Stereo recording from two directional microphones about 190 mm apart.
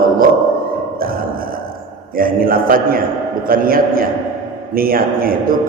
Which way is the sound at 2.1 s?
50° right (ahead or behind).